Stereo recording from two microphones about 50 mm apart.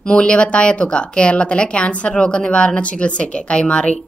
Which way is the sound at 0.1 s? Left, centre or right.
Left.